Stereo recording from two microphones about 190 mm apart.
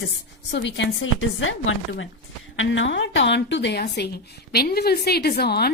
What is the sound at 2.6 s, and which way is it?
Speech, 75° left (ahead or behind).